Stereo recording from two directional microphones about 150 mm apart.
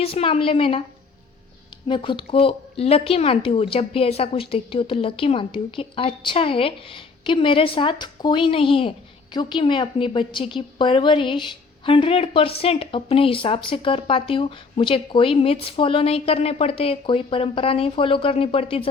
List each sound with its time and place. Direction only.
0.0 s speech: 40° left (ahead or behind)
1.9 s speech: 35° left (ahead or behind)